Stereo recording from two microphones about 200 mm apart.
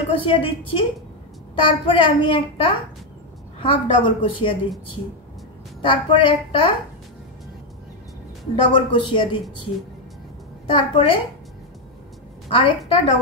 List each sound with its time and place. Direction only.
0.2 s a woman's voice: 25° left (ahead or behind)
5.8 s a woman's voice: 25° left (ahead or behind)
8.6 s a woman's voice: 25° left (ahead or behind)
10.7 s a woman's voice: 25° left (ahead or behind)
12.4 s a woman's voice: 25° left (ahead or behind)